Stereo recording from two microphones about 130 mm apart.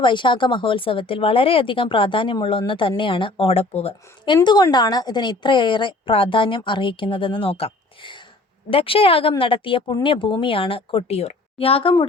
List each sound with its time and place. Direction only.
0.0 s a woman's voice: 40° left (ahead or behind)
4.4 s a woman's voice: 35° left (ahead or behind)